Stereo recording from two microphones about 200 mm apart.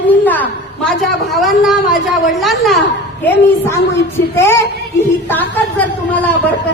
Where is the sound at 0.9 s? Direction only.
Centre (ahead or behind).